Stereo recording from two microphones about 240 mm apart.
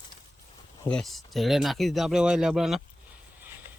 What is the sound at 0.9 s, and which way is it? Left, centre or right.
Speech, centre.